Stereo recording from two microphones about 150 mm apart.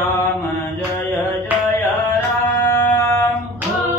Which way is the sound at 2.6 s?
15° left (ahead or behind).